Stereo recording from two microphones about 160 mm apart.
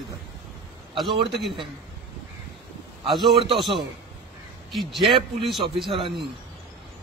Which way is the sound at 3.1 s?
Centre (ahead or behind).